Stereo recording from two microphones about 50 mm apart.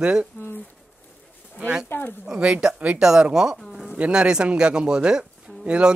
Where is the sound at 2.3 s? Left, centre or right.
Centre.